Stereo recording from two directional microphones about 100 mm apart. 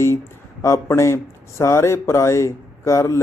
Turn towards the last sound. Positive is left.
turn(degrees=30)  # may be behind; listen again after turning